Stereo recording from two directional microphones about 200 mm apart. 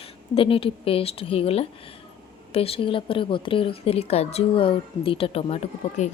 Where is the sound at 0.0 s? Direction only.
25° left (ahead or behind).